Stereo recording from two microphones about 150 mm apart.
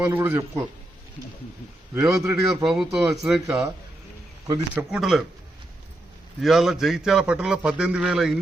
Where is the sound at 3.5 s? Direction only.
20° right (ahead or behind).